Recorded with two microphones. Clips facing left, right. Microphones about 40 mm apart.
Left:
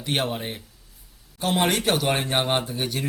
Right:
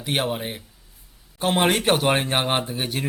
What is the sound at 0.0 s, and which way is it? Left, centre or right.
Speech, centre.